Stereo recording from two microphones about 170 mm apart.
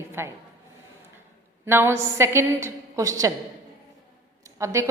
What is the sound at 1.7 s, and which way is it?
A woman's voice, 15° right (ahead or behind).